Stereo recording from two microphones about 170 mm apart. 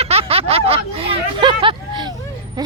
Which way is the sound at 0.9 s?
35° right (ahead or behind).